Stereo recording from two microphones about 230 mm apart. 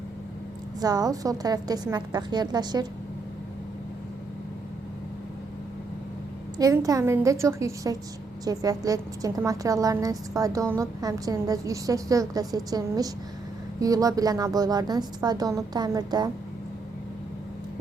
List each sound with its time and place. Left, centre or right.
0.8 s a woman's voice: centre
6.6 s a woman's voice: centre